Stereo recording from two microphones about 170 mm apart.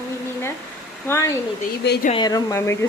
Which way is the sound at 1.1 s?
15° left (ahead or behind).